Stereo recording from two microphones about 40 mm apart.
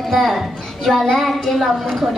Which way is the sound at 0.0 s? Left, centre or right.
Centre.